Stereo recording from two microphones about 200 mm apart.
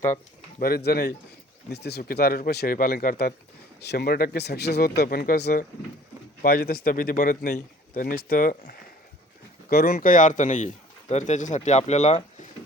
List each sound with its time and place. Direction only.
0.6 s speech: 50° left (ahead or behind); by 12.5 s 35° left (ahead or behind)